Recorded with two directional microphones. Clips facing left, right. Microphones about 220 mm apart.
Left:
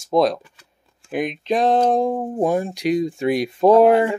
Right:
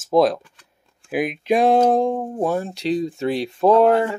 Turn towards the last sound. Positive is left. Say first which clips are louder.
# left 2 dB
turn(degrees=10)  # may be behind; listen again after turning